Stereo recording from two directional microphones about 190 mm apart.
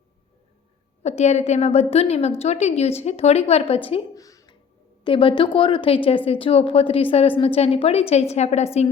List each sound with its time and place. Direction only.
1.0 s a woman's voice: 35° left (ahead or behind)
4.1 s a sound: 20° left (ahead or behind)
5.0 s a woman's voice: 25° left (ahead or behind)